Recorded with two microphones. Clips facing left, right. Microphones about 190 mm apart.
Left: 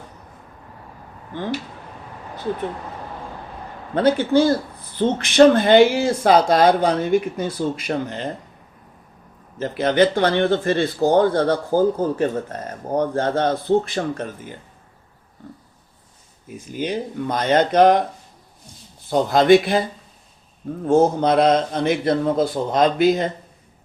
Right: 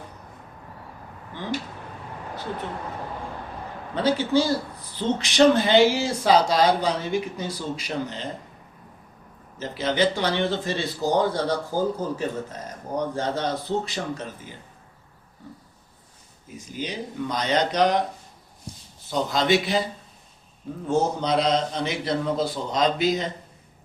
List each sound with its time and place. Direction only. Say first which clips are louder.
3.9 s speech: left 5 dB; 55° left (ahead or behind)
9.6 s speech: left 7 dB; 55° left (ahead or behind)
16.5 s a man's voice: left 7 dB; 55° left (ahead or behind)
19.1 s speech: left 8 dB; 55° left (ahead or behind)
20.8 s a man's voice: left 7 dB; 50° left (ahead or behind)